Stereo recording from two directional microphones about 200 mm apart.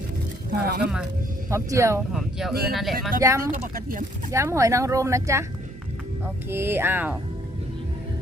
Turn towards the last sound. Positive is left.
turn(degrees=-10)  # may be behind; listen again after turning